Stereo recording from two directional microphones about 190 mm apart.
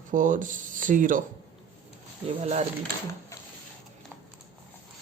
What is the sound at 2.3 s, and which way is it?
Speech, 30° right (ahead or behind).